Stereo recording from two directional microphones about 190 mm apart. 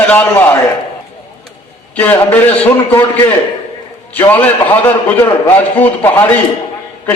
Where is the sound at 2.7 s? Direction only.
25° left (ahead or behind).